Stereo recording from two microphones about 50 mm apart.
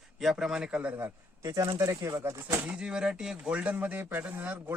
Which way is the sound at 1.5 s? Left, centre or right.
Right.